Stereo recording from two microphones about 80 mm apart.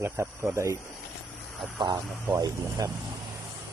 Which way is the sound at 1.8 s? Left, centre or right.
Right.